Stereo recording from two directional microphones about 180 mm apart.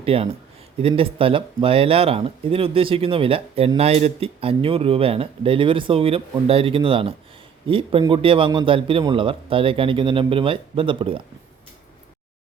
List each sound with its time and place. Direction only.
0.0 s a man's voice: 30° right (ahead or behind)